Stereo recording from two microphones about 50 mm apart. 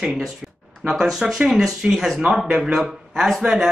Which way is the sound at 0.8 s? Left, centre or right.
Centre.